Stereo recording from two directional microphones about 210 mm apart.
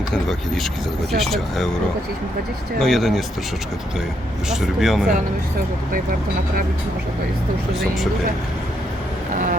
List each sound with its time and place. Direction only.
0.1 s speech: centre (ahead or behind)
2.8 s speech: centre (ahead or behind)
4.4 s speech: centre (ahead or behind)
9.3 s speech: 35° right (ahead or behind)